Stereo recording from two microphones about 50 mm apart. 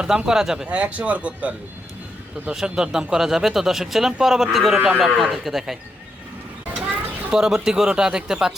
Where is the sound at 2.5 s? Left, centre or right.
Centre.